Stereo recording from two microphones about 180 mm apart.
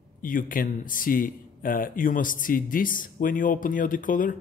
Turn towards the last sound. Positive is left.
turn(degrees=50)  # may be behind; listen again after turning